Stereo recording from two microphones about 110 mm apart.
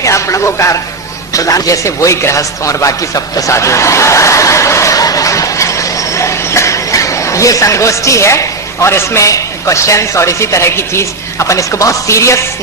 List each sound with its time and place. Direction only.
0.0 s a man's voice: 30° left (ahead or behind)